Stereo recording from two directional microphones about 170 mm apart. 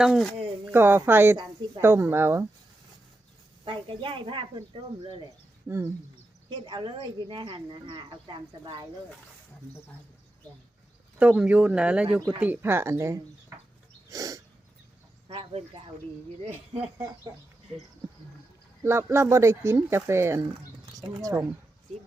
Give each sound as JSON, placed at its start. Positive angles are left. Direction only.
{"t": 0.0, "sound": "speech", "side_deg": 0}
{"t": 0.7, "sound": "speech", "side_deg": -10}
{"t": 3.6, "sound": "speech", "side_deg": -30}
{"t": 5.6, "sound": "speech", "side_deg": -15}
{"t": 6.5, "sound": "speech", "side_deg": -25}
{"t": 11.2, "sound": "speech", "side_deg": -5}
{"t": 14.1, "sound": "a sound", "side_deg": -20}
{"t": 15.3, "sound": "speech", "side_deg": -30}
{"t": 18.8, "sound": "speech", "side_deg": -15}